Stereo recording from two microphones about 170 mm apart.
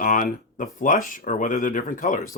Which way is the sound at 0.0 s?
50° left (ahead or behind).